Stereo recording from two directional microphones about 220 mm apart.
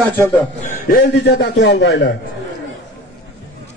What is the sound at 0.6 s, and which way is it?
A man's voice, 45° left (ahead or behind).